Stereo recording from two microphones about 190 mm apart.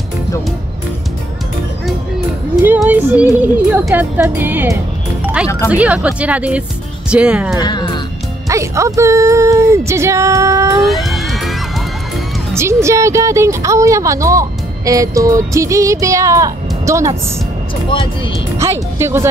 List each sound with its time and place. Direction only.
2.6 s speech: 10° right (ahead or behind)
5.2 s music: 5° right (ahead or behind)
5.7 s speech: 5° right (ahead or behind)
7.6 s speech: 20° left (ahead or behind)
8.5 s speech: 15° right (ahead or behind)
10.8 s music: centre (ahead or behind)
12.5 s speech: 15° right (ahead or behind)
18.6 s speech: 15° right (ahead or behind)